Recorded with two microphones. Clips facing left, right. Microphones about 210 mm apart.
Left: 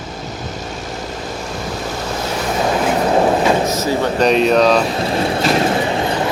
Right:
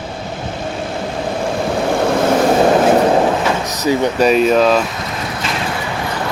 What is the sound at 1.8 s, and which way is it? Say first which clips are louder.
Vehicle: right 11 dB; 65° right (ahead or behind).